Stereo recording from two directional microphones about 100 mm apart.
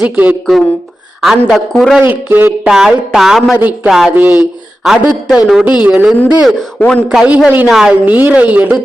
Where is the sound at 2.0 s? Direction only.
20° right (ahead or behind).